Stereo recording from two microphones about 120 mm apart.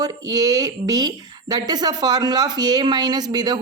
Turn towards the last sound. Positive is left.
turn(degrees=-35)  # may be behind; listen again after turning